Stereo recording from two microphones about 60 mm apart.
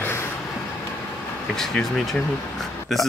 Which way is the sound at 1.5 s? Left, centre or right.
Centre.